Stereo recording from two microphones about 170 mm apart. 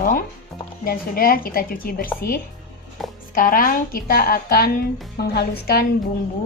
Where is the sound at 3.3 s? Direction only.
55° left (ahead or behind); by 5.8 s 70° left (ahead or behind).